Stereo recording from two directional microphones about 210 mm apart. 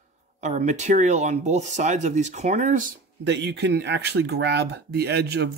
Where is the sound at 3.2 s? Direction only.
55° right (ahead or behind).